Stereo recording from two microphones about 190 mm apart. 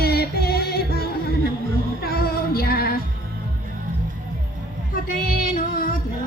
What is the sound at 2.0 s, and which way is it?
Music, 55° left (ahead or behind).